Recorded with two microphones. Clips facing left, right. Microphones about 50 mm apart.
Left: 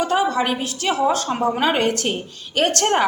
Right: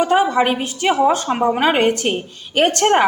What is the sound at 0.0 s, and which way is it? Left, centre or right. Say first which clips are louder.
A woman's voice: right 4 dB; right.